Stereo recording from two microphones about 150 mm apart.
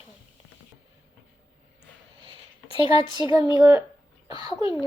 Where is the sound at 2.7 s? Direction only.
35° left (ahead or behind).